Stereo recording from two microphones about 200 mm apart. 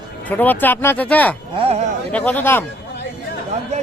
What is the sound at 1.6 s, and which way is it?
Speech, 30° right (ahead or behind).